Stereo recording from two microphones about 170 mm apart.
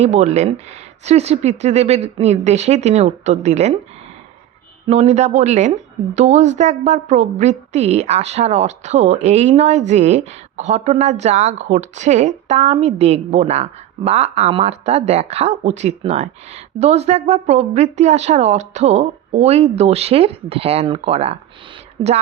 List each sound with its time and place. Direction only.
0.0 s a woman's voice: 40° right (ahead or behind)
4.9 s a woman's voice: 40° right (ahead or behind)